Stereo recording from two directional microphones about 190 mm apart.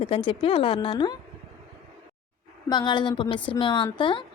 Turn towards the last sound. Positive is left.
turn(degrees=25)  # may be behind; listen again after turning